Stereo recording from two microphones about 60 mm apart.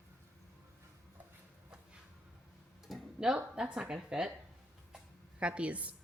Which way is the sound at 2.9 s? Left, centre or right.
Centre.